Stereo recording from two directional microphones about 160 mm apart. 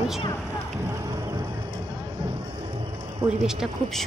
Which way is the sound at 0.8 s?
20° right (ahead or behind).